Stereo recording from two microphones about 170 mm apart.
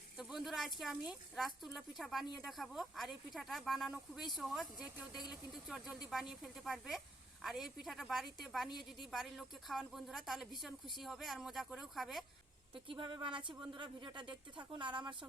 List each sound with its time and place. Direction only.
0.2 s a sound: centre (ahead or behind)
0.8 s a woman's voice: centre (ahead or behind)
12.7 s speech: 30° right (ahead or behind)